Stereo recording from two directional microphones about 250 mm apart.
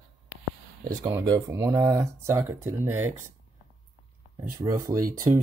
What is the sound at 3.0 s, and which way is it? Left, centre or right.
Speech, right.